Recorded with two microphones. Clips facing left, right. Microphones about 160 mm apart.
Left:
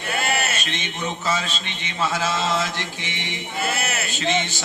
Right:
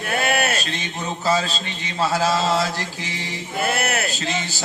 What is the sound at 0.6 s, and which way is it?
Speech, 35° right (ahead or behind).